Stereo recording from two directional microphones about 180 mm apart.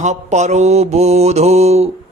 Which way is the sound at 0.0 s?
40° right (ahead or behind).